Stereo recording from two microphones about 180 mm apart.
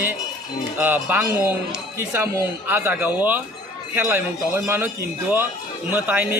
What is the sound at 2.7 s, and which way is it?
A woman's voice, 10° right (ahead or behind).